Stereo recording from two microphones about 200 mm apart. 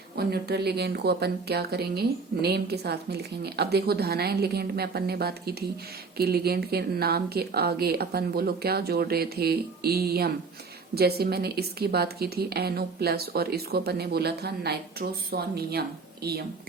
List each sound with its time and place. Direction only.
0.2 s speech: 50° right (ahead or behind)